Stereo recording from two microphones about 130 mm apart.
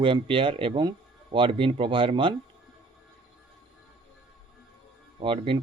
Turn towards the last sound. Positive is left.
turn(degrees=-40)  # may be behind; listen again after turning